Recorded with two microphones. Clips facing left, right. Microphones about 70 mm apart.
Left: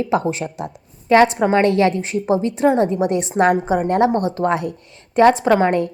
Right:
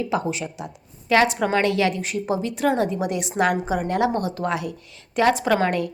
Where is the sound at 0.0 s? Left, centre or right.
Left.